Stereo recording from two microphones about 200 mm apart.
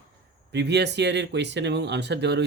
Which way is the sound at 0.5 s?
60° right (ahead or behind).